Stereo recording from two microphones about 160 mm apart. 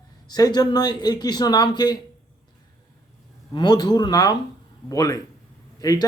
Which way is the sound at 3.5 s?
25° left (ahead or behind).